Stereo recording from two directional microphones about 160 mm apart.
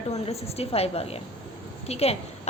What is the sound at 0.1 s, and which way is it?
A woman's voice, 40° left (ahead or behind).